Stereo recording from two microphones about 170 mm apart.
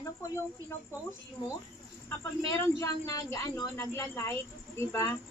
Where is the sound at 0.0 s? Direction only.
15° left (ahead or behind).